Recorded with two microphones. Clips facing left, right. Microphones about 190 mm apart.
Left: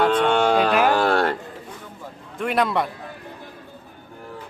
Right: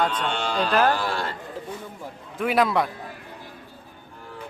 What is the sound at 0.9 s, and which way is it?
Speech, 65° left (ahead or behind).